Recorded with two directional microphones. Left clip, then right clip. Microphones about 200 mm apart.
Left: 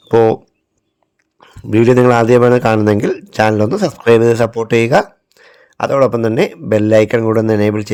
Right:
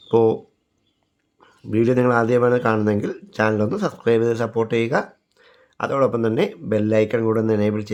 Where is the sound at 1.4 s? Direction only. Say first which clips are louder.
Left 9 dB; 35° left (ahead or behind).